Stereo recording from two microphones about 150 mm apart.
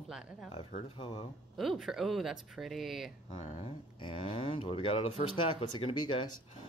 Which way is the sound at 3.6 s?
35° left (ahead or behind).